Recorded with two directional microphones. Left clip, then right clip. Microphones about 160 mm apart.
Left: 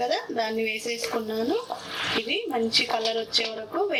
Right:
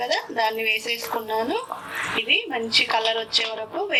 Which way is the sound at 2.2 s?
50° left (ahead or behind).